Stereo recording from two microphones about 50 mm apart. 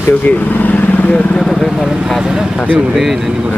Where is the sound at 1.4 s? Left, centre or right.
Centre.